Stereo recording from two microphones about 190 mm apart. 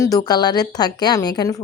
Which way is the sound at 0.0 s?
20° left (ahead or behind).